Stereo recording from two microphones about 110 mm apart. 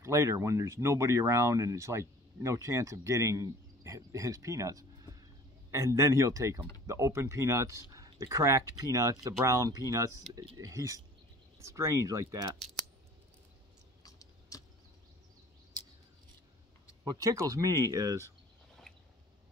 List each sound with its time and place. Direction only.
0.0 s speech: 25° right (ahead or behind)
14.0 s a sound: 30° left (ahead or behind)
17.0 s speech: 35° right (ahead or behind)